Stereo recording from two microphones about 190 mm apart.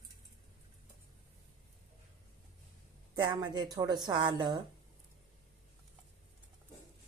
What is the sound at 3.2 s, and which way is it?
A woman's voice, 25° right (ahead or behind).